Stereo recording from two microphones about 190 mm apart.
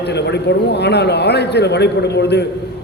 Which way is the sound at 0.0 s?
60° left (ahead or behind).